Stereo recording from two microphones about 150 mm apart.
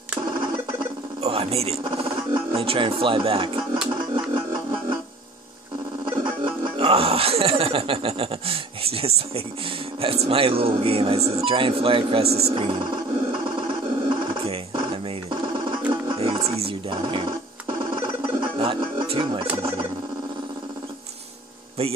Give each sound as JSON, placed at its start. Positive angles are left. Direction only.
{"t": 0.3, "sound": "speech", "side_deg": -30}
{"t": 4.1, "sound": "music", "side_deg": -35}
{"t": 6.0, "sound": "speech", "side_deg": -35}
{"t": 13.3, "sound": "a sound", "side_deg": -35}
{"t": 15.9, "sound": "music", "side_deg": -35}
{"t": 17.0, "sound": "a sound", "side_deg": -35}